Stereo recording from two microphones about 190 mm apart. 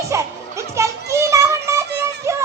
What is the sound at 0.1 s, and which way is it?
Music, 15° right (ahead or behind).